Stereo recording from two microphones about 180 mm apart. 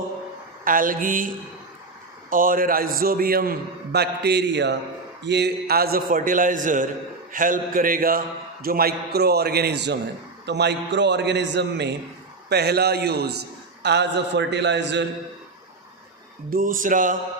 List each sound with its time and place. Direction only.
0.6 s a man's voice: 50° right (ahead or behind)
2.3 s a man's voice: 50° right (ahead or behind); by 15.0 s 75° right (ahead or behind)
16.5 s a man's voice: 50° right (ahead or behind)